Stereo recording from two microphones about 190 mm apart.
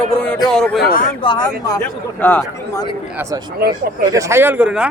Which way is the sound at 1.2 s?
25° left (ahead or behind).